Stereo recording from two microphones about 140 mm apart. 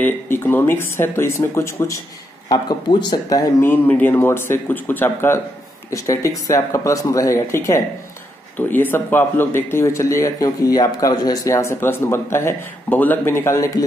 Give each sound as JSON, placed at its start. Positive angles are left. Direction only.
{"t": 0.0, "sound": "speech", "side_deg": 15}
{"t": 2.5, "sound": "a man's voice", "side_deg": 30}
{"t": 3.6, "sound": "a man's voice", "side_deg": 15}